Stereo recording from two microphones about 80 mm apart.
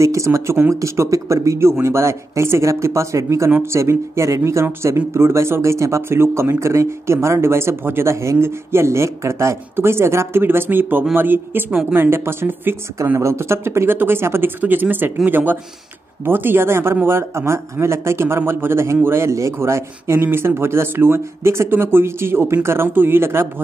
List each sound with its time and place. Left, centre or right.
0.0 s speech: right